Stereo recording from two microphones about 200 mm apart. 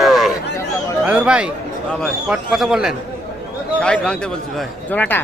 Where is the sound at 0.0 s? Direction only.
Centre (ahead or behind).